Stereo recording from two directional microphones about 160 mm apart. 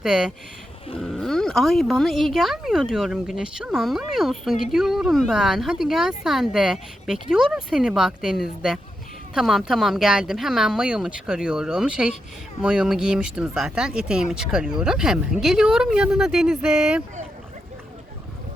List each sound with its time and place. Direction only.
0.0 s speech: 5° right (ahead or behind)